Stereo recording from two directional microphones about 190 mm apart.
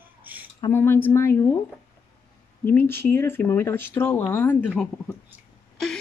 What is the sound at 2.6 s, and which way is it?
A woman's voice, 10° left (ahead or behind).